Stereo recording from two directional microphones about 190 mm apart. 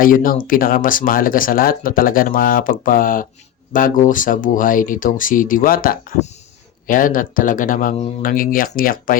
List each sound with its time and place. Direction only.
0.0 s speech: 45° left (ahead or behind)